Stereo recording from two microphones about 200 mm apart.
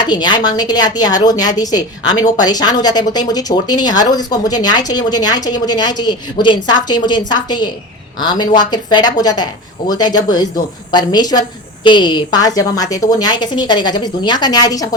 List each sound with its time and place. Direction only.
0.0 s speech: 20° left (ahead or behind)